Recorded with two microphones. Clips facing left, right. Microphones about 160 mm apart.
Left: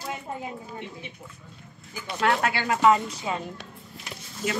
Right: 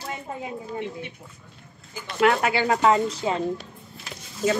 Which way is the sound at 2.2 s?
20° right (ahead or behind).